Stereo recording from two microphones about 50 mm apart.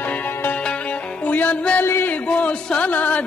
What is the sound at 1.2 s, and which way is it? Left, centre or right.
Music, left.